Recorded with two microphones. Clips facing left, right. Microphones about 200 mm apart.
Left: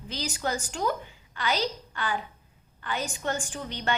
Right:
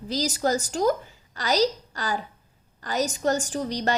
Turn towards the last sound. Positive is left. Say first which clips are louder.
# right 6 dB
turn(degrees=-40)  # may be behind; listen again after turning